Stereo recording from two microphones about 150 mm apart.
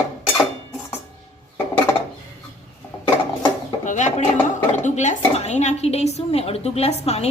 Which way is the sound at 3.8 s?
55° left (ahead or behind).